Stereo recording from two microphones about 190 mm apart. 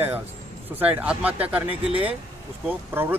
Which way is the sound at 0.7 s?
10° right (ahead or behind).